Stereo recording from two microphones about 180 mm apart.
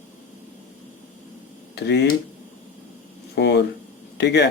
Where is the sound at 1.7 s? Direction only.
70° left (ahead or behind).